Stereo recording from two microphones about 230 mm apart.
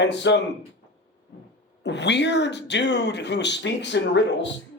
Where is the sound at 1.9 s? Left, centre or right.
Left.